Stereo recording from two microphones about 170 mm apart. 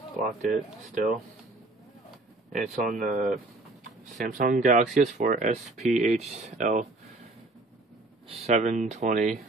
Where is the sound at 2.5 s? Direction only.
50° right (ahead or behind).